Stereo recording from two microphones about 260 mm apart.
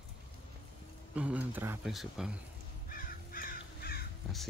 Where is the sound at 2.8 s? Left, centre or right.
Left.